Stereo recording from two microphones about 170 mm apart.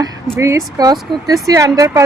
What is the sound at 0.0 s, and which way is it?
Speech, 20° right (ahead or behind).